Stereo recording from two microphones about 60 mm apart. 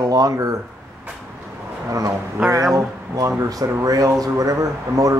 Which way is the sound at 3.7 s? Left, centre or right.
Right.